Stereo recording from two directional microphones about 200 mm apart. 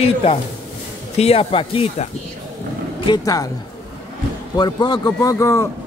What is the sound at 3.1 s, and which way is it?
Speech, 15° left (ahead or behind).